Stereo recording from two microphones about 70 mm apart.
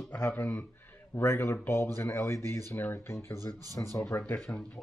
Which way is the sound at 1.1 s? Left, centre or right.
Left.